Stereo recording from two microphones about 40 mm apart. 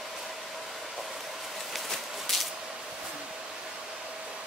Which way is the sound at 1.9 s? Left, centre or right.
Centre.